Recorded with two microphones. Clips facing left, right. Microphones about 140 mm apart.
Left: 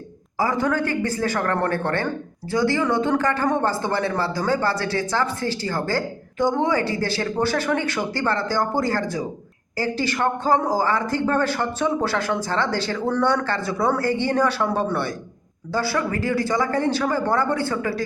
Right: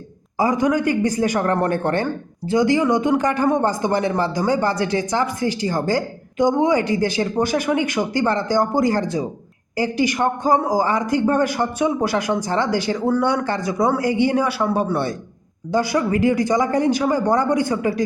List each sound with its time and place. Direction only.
0.3 s a man's voice: 20° right (ahead or behind)